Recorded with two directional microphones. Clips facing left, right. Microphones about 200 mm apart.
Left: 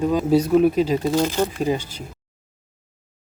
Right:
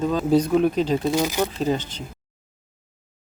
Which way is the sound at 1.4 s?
10° left (ahead or behind).